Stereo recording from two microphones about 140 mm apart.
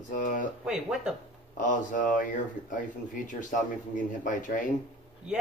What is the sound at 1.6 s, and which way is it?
Speech, 65° left (ahead or behind).